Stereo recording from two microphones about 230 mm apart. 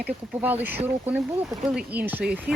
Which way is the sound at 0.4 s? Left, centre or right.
Centre.